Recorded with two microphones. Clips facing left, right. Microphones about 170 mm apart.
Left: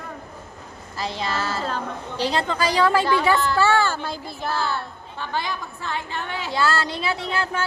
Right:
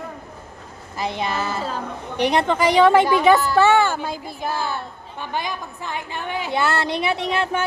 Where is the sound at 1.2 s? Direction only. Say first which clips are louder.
Right 1 dB; 15° right (ahead or behind).